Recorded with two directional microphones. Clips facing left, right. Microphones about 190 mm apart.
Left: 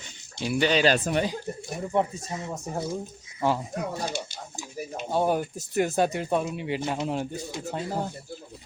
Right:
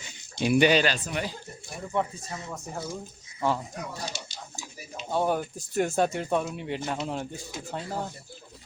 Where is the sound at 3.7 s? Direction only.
55° left (ahead or behind).